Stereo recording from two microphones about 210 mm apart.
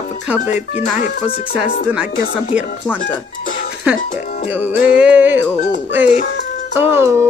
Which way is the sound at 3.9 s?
5° right (ahead or behind).